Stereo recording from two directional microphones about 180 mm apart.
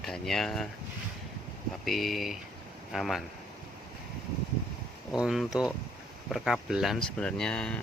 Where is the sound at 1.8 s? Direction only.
Centre (ahead or behind).